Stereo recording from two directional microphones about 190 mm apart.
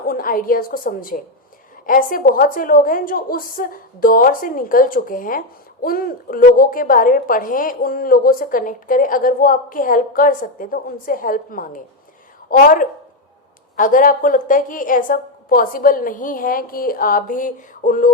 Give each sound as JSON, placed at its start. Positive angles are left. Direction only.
{"t": 0.1, "sound": "a woman's voice", "side_deg": 50}